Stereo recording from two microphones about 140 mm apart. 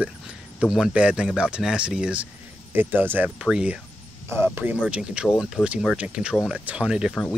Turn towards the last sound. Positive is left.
turn(degrees=-5)  # may be behind; listen again after turning